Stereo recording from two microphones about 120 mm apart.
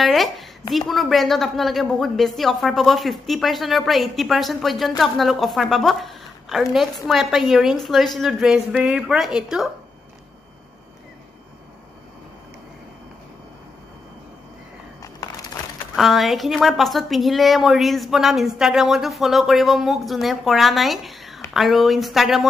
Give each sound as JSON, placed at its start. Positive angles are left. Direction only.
{"t": 0.0, "sound": "a woman's voice", "side_deg": 0}
{"t": 15.0, "sound": "a sound", "side_deg": 30}
{"t": 16.0, "sound": "a woman's voice", "side_deg": 0}